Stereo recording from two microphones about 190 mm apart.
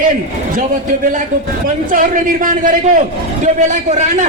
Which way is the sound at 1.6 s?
45° right (ahead or behind).